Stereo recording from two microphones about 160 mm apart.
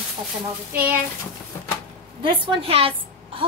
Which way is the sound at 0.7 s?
10° right (ahead or behind).